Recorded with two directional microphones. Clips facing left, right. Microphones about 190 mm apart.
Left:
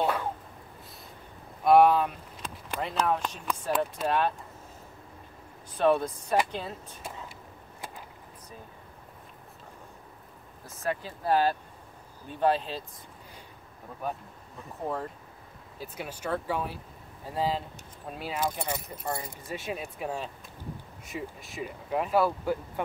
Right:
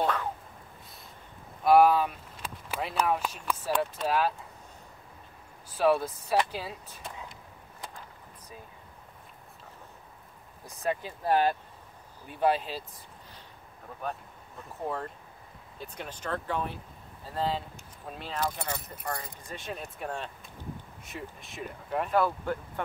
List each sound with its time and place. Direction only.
0.0 s a sound: 10° left (ahead or behind)
1.6 s speech: centre (ahead or behind)
5.8 s speech: 5° right (ahead or behind)
10.8 s speech: 20° right (ahead or behind)
12.3 s speech: 10° right (ahead or behind)
15.8 s speech: 10° left (ahead or behind)